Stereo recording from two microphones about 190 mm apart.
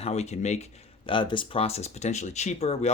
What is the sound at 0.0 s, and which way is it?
Speech, 35° left (ahead or behind).